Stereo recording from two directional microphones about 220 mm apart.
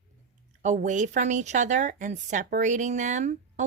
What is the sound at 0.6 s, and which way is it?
Speech, 35° right (ahead or behind).